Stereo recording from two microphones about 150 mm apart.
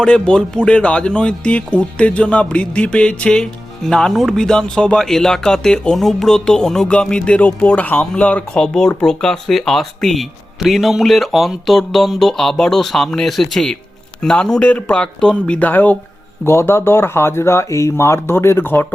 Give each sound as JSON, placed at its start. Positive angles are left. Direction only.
{"t": 0.0, "sound": "speech", "side_deg": 5}